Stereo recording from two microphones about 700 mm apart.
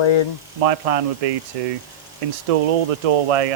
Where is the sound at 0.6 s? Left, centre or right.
Right.